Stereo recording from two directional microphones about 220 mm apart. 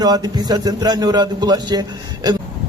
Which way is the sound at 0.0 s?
20° right (ahead or behind).